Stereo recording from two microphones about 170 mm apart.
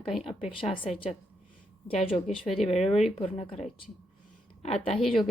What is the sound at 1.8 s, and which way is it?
A woman's voice, 35° left (ahead or behind).